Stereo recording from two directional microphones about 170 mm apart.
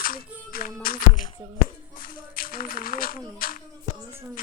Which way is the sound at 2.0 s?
60° left (ahead or behind).